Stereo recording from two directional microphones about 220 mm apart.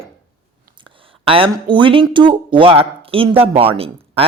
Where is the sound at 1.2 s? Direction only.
25° right (ahead or behind).